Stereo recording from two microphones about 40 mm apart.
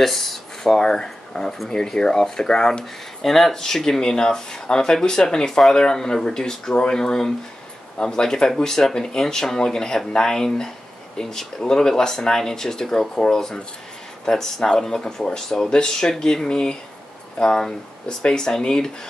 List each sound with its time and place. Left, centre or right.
0.0 s speech: centre
0.7 s speech: centre
3.2 s speech: centre